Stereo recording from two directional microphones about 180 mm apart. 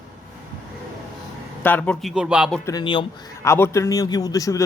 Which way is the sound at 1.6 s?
10° left (ahead or behind).